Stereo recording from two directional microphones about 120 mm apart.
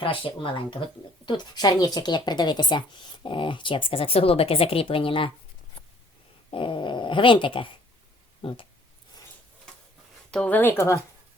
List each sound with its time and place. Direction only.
0.0 s speech: 45° left (ahead or behind)
6.5 s speech: 45° left (ahead or behind)
10.3 s speech: 10° left (ahead or behind)